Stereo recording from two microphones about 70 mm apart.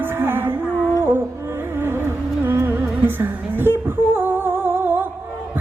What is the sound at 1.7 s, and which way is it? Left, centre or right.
Music, right.